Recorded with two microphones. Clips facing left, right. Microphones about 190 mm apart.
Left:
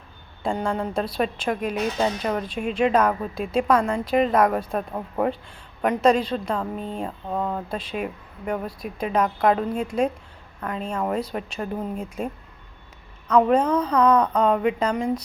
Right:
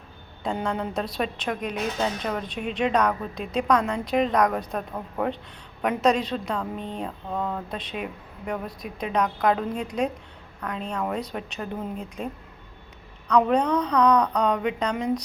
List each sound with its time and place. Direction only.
0.7 s a woman's voice: centre (ahead or behind)
11.9 s speech: 50° left (ahead or behind)
13.2 s a woman's voice: 5° left (ahead or behind)